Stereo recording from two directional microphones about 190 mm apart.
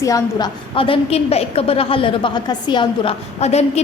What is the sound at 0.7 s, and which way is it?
A woman's voice, 30° left (ahead or behind).